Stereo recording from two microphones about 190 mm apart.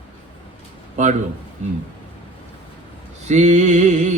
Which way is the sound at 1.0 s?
40° right (ahead or behind).